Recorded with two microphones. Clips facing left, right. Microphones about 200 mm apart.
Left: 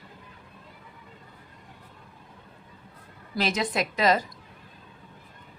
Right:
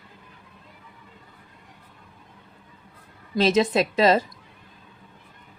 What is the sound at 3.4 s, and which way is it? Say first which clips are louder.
Speech: right 7 dB; 25° right (ahead or behind).